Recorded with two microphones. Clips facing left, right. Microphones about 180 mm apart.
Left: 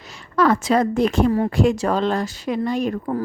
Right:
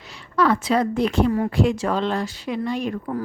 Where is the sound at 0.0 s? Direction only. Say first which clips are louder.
Left 2 dB; 45° left (ahead or behind).